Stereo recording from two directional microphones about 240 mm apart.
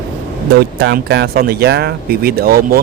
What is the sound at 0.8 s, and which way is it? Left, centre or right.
Speech, right.